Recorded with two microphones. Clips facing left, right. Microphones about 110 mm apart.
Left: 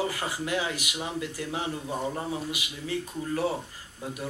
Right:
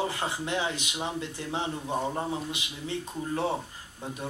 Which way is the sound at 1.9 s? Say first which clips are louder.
Right 2 dB; 10° right (ahead or behind).